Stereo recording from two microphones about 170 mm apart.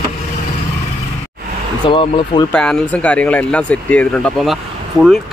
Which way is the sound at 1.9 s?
30° left (ahead or behind).